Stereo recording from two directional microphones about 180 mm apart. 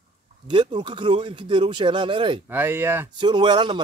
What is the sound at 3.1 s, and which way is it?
Speech, 25° right (ahead or behind).